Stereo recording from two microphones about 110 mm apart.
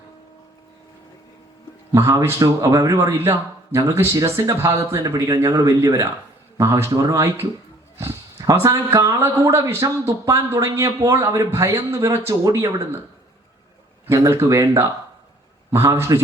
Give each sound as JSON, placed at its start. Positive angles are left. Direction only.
{"t": 1.9, "sound": "speech", "side_deg": -30}
{"t": 9.0, "sound": "speech", "side_deg": -25}
{"t": 14.1, "sound": "speech", "side_deg": -30}